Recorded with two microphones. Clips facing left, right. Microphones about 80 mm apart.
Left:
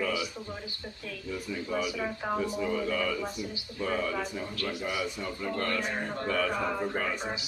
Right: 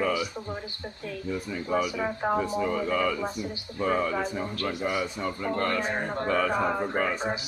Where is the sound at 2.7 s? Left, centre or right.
Right.